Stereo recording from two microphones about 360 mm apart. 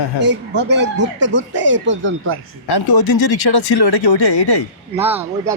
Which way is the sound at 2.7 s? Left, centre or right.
Left.